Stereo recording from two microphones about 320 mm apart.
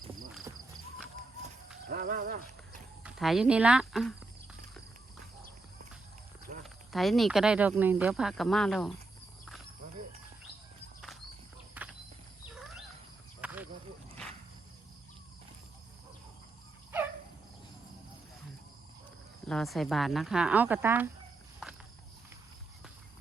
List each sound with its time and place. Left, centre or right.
1.9 s speech: right
3.0 s speech: centre
6.6 s speech: centre
11.7 s horse: centre
13.4 s a sound: centre
19.5 s speech: centre